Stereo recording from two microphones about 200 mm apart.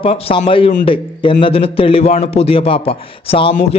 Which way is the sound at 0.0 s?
25° left (ahead or behind).